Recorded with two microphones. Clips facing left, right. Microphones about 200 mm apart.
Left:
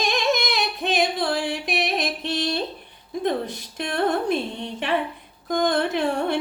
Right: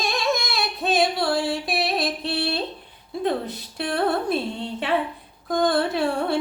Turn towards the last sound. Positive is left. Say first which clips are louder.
# even
turn(degrees=15)  # may be behind; listen again after turning